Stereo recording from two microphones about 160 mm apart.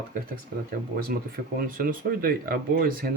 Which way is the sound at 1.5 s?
60° right (ahead or behind).